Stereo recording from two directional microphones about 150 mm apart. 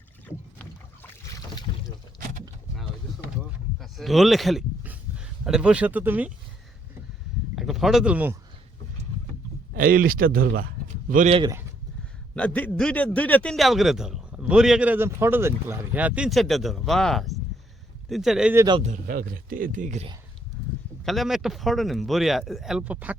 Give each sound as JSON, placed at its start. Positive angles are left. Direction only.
{"t": 3.8, "sound": "speech", "side_deg": 0}
{"t": 4.8, "sound": "a sound", "side_deg": -10}
{"t": 7.5, "sound": "speech", "side_deg": 0}
{"t": 9.7, "sound": "speech", "side_deg": -70}
{"t": 10.8, "sound": "a sound", "side_deg": -55}
{"t": 12.4, "sound": "a man's voice", "side_deg": 10}
{"t": 18.5, "sound": "speech", "side_deg": -25}
{"t": 19.0, "sound": "speech", "side_deg": -75}
{"t": 21.0, "sound": "a man's voice", "side_deg": 0}